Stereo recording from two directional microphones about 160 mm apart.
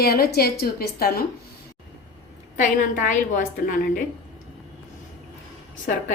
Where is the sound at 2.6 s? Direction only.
55° left (ahead or behind).